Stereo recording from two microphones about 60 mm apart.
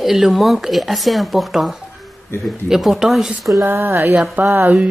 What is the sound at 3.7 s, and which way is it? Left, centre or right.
Speech, right.